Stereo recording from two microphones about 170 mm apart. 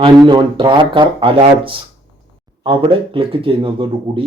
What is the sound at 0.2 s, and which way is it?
Speech, 30° right (ahead or behind).